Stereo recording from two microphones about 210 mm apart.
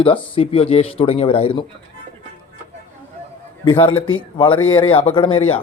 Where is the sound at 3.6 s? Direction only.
25° left (ahead or behind).